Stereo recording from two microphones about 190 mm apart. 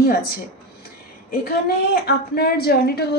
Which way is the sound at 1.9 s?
55° left (ahead or behind).